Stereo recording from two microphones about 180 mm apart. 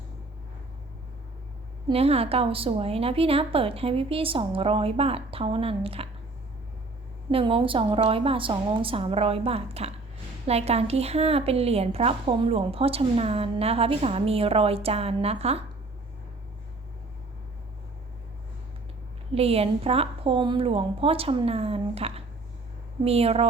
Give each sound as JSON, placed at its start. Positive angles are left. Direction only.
{"t": 1.9, "sound": "speech", "side_deg": -35}
{"t": 7.3, "sound": "speech", "side_deg": -30}
{"t": 19.3, "sound": "speech", "side_deg": -35}